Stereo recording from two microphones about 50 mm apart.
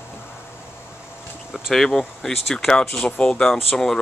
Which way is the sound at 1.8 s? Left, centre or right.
Centre.